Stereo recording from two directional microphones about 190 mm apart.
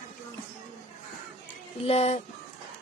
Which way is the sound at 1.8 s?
35° left (ahead or behind).